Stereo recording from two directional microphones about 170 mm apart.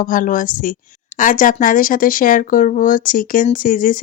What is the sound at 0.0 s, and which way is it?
A woman's voice, 50° left (ahead or behind).